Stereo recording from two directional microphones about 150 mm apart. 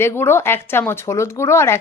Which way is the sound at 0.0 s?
15° left (ahead or behind).